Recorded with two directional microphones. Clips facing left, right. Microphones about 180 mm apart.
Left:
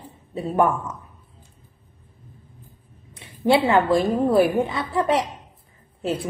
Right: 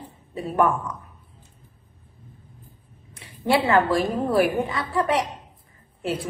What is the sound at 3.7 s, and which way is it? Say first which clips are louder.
A woman's voice: left 2 dB; 20° left (ahead or behind).